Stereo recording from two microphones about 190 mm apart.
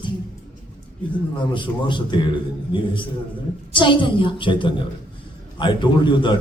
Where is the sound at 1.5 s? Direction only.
25° left (ahead or behind).